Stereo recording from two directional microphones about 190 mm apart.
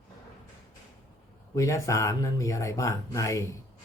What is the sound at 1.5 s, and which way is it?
Speech, 15° left (ahead or behind).